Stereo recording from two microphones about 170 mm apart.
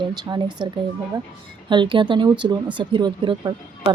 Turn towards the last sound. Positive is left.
turn(degrees=-30)  # may be behind; listen again after turning